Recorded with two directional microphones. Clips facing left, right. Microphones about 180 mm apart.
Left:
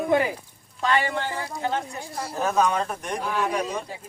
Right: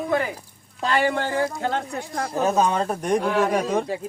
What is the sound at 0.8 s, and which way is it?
Speech, 40° right (ahead or behind).